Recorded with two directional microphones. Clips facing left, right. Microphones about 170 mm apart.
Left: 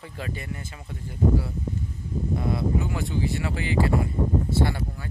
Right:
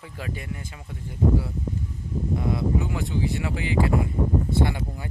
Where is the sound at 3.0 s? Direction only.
20° right (ahead or behind).